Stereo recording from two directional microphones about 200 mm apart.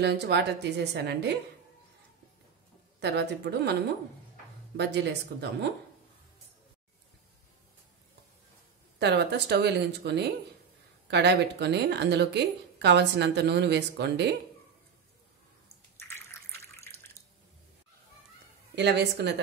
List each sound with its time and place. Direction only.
0.0 s speech: 55° right (ahead or behind)
3.0 s speech: 55° right (ahead or behind)
4.7 s speech: 60° right (ahead or behind)
9.0 s speech: 55° right (ahead or behind)
16.0 s drip: 10° left (ahead or behind)
18.8 s speech: 55° right (ahead or behind)